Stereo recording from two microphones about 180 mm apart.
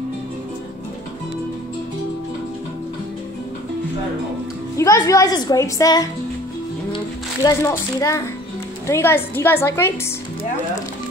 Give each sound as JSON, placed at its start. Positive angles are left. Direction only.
{"t": 4.7, "sound": "a child's voice", "side_deg": 15}
{"t": 7.4, "sound": "a woman's voice", "side_deg": 15}